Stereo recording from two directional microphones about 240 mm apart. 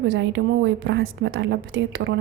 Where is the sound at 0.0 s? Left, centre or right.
Right.